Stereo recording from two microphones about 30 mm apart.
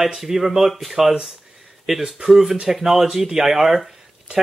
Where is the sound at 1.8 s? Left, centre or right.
Centre.